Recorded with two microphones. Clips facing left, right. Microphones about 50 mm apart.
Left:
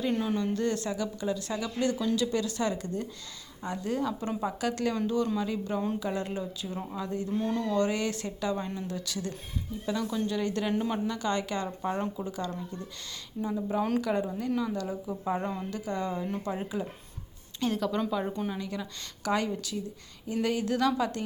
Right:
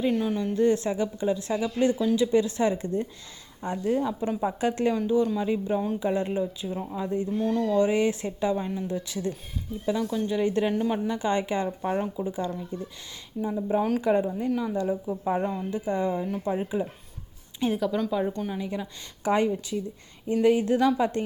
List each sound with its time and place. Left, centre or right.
0.1 s speech: centre
0.5 s speech: centre
4.4 s speech: right
7.3 s speech: centre
7.7 s speech: centre
8.5 s speech: centre
8.9 s speech: right
9.8 s speech: centre
10.3 s speech: centre
10.7 s speech: centre
11.1 s speech: right; by 18.0 s centre
18.5 s speech: centre